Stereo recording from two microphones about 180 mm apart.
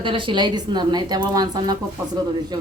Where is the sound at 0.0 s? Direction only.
30° right (ahead or behind).